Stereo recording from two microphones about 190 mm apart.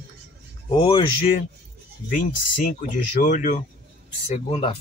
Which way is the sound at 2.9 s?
45° left (ahead or behind).